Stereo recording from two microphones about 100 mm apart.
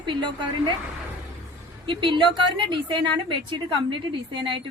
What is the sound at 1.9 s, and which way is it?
Speech, 55° right (ahead or behind).